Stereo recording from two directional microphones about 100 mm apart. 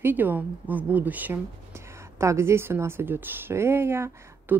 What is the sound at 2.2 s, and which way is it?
Speech, 30° right (ahead or behind).